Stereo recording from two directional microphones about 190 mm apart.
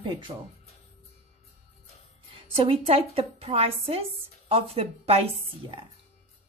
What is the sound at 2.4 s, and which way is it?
A woman's voice, 30° right (ahead or behind).